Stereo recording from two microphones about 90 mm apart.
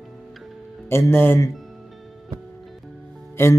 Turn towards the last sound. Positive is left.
turn(degrees=30)  # may be behind; listen again after turning